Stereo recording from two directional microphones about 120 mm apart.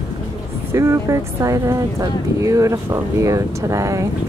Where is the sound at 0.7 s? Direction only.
25° right (ahead or behind).